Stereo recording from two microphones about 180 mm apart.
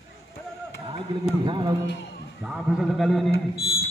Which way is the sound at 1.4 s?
25° right (ahead or behind).